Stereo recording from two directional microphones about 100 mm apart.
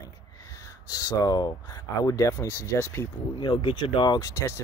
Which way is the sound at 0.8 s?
40° left (ahead or behind).